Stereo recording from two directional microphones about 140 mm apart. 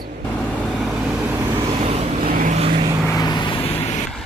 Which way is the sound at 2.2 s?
75° right (ahead or behind).